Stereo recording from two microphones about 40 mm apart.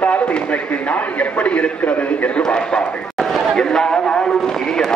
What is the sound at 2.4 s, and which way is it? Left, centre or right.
Speech, left.